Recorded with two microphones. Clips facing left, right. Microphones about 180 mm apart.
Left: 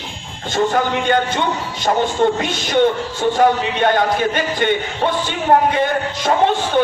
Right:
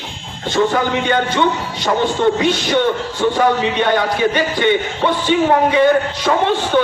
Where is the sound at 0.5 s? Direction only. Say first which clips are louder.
Right 1 dB; 50° left (ahead or behind).